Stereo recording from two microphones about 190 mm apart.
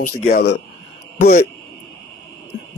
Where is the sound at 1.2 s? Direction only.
50° left (ahead or behind).